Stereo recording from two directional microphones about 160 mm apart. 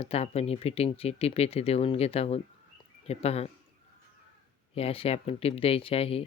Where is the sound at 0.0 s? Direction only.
40° left (ahead or behind).